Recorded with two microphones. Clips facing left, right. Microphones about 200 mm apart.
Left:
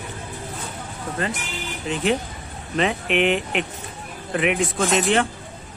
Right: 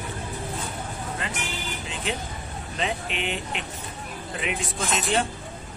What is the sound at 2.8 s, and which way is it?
Jingle bell, 65° left (ahead or behind).